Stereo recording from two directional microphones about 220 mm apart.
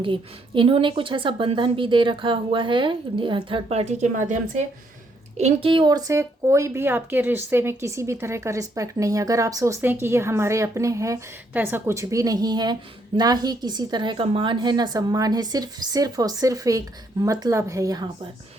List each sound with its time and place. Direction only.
0.0 s a woman's voice: 25° right (ahead or behind)